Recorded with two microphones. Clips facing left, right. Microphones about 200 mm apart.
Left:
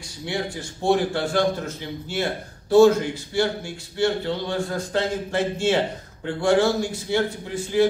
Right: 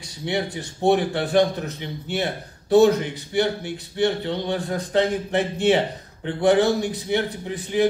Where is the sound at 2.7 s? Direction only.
20° right (ahead or behind).